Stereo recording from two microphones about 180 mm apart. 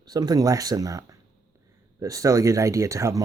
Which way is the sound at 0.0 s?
20° right (ahead or behind).